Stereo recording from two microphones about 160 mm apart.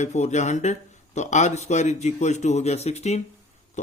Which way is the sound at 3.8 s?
45° left (ahead or behind).